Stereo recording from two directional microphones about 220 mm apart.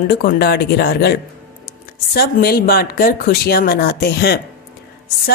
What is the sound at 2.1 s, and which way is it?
Speech, 45° left (ahead or behind).